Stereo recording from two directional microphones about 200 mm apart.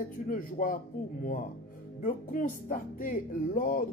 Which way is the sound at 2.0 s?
40° left (ahead or behind).